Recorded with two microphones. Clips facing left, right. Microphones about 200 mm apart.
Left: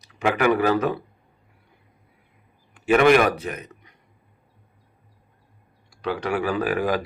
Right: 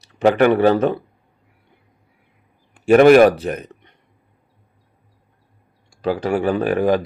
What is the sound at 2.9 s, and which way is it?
Speech, 40° right (ahead or behind).